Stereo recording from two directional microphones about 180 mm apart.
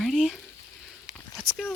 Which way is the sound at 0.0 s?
Centre (ahead or behind).